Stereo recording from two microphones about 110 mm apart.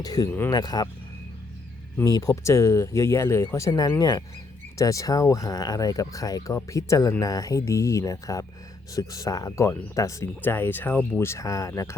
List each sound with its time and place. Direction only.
0.0 s speech: 35° left (ahead or behind)
0.3 s speech: 20° left (ahead or behind)
0.5 s speech: 35° left (ahead or behind)
2.0 s speech: 35° left (ahead or behind)
3.7 s speech: 40° left (ahead or behind)
10.4 s speech: 20° left (ahead or behind)